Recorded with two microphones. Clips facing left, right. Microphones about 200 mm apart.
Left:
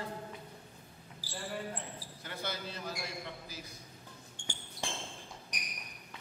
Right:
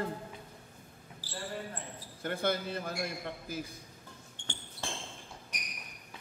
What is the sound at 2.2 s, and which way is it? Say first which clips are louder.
A man's voice: right 9 dB; 50° right (ahead or behind).